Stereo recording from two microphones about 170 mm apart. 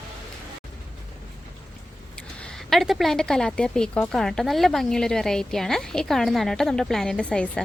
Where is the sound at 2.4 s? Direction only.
Centre (ahead or behind).